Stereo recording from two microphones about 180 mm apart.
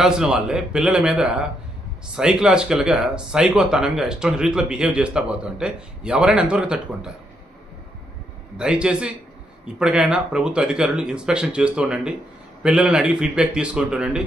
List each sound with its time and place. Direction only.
0.0 s speech: 5° right (ahead or behind)
8.5 s speech: 5° right (ahead or behind)